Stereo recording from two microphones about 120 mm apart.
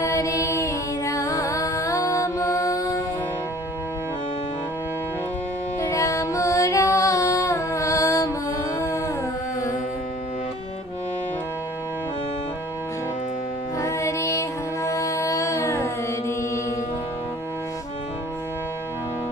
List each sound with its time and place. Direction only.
0.0 s music: 25° left (ahead or behind)
5.9 s music: 25° left (ahead or behind)
13.7 s music: 25° left (ahead or behind)